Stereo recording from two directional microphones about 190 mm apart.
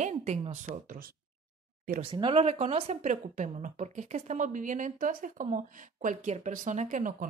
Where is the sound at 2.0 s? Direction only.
25° right (ahead or behind).